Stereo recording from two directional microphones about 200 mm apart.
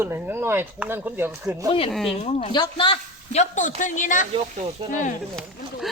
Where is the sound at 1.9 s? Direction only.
Centre (ahead or behind).